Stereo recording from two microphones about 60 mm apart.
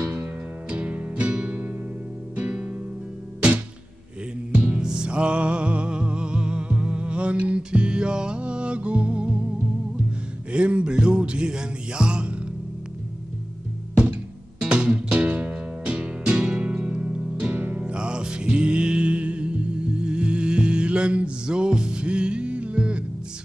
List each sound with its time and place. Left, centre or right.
0.7 s music: right
4.6 s music: centre
10.5 s music: centre
14.6 s music: centre
17.9 s music: centre